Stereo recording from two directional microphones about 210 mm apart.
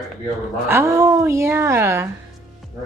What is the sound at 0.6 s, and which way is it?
A woman's voice, 15° right (ahead or behind).